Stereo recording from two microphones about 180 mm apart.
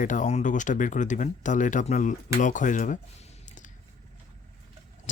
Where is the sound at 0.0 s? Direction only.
45° left (ahead or behind).